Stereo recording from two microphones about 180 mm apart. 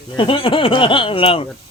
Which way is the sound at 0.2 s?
30° left (ahead or behind).